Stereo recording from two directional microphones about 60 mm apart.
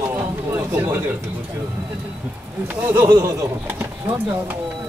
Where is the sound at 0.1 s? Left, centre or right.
Right.